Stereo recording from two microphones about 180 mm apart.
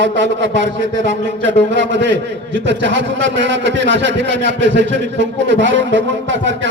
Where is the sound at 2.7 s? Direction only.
90° right.